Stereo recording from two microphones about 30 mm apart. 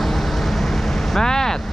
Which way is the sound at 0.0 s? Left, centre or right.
Centre.